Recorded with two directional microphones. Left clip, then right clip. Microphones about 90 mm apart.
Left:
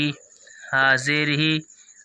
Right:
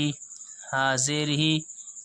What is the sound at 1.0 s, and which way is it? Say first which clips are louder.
Speech: left 5 dB; 25° right (ahead or behind).